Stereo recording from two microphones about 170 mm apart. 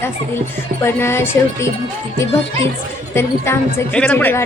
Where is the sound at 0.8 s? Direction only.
15° left (ahead or behind).